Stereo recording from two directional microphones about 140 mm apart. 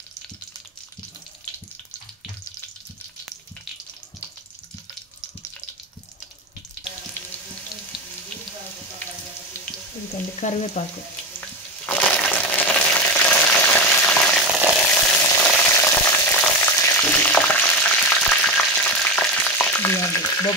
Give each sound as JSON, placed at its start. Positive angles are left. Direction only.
{"t": 10.4, "sound": "frying", "side_deg": 60}
{"t": 11.4, "sound": "a sound", "side_deg": 10}
{"t": 14.9, "sound": "frying", "side_deg": 15}
{"t": 20.0, "sound": "frying", "side_deg": 25}